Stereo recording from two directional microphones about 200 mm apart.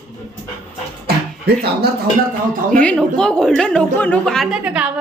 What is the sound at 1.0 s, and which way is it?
Music, 50° right (ahead or behind).